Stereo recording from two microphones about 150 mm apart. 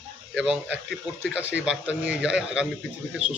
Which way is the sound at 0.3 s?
5° right (ahead or behind).